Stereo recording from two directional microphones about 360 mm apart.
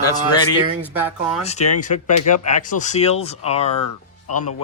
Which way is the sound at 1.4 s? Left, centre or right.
Centre.